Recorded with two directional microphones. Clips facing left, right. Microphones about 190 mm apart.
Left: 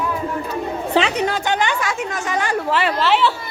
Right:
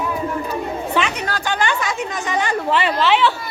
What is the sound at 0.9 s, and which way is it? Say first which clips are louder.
A woman's voice: left 6 dB; 30° left (ahead or behind).